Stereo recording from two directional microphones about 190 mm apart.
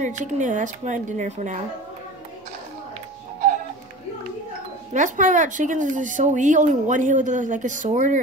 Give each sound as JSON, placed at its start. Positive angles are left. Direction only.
{"t": 0.0, "sound": "a woman's voice", "side_deg": -40}
{"t": 4.9, "sound": "a woman's voice", "side_deg": -40}